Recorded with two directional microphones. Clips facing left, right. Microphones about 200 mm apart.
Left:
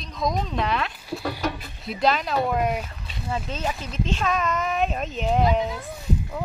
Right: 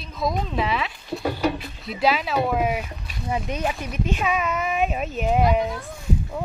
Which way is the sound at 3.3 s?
15° right (ahead or behind).